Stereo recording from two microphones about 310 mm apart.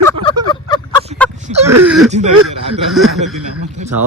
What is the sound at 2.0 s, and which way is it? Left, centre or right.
Speech, right.